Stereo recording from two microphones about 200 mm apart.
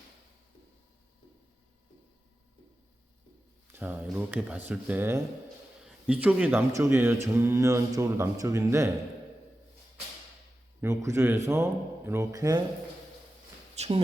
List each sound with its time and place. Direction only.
3.7 s speech: 10° right (ahead or behind)
10.8 s speech: 15° right (ahead or behind)
13.7 s speech: 30° right (ahead or behind)